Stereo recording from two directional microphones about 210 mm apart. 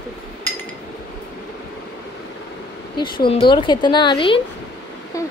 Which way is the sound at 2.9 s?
20° left (ahead or behind).